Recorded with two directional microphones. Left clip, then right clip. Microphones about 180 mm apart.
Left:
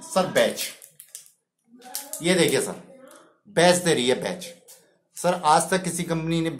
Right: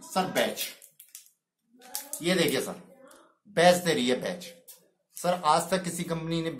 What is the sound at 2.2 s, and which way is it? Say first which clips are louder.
Speech: left 5 dB; 15° left (ahead or behind).